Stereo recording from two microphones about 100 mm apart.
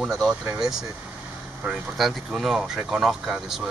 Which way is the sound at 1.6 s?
5° right (ahead or behind).